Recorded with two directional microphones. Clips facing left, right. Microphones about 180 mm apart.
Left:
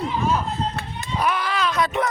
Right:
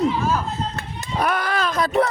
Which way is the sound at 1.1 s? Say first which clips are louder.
Right 1 dB; 50° right (ahead or behind).